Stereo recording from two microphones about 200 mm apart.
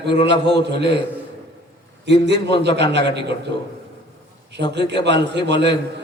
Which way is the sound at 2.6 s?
60° right (ahead or behind).